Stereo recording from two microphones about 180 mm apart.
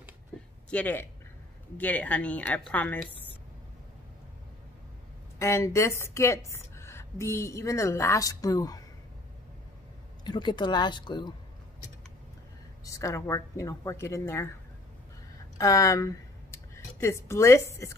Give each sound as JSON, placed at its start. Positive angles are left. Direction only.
{"t": 0.7, "sound": "a woman's voice", "side_deg": 10}
{"t": 5.4, "sound": "a woman's voice", "side_deg": 15}
{"t": 10.2, "sound": "speech", "side_deg": 25}
{"t": 12.8, "sound": "a woman's voice", "side_deg": 15}
{"t": 15.5, "sound": "speech", "side_deg": 20}